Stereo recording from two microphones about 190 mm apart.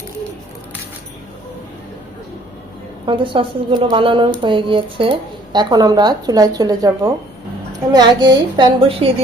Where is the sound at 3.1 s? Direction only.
25° right (ahead or behind).